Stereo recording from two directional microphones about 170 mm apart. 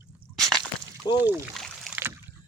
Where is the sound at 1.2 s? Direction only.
10° right (ahead or behind).